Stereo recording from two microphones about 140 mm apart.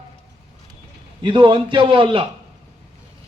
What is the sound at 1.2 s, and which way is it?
A man's voice, 35° right (ahead or behind).